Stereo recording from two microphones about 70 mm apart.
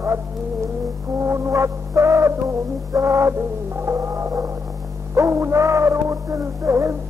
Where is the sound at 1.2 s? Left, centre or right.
Right.